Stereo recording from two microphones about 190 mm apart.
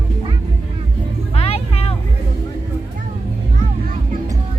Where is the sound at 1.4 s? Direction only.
30° left (ahead or behind).